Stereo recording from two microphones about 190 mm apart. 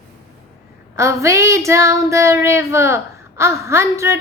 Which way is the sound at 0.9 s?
15° right (ahead or behind).